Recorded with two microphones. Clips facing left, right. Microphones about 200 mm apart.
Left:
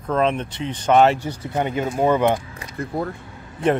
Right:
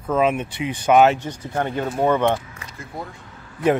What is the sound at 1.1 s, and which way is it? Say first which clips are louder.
Speech: left 1 dB; 10° left (ahead or behind).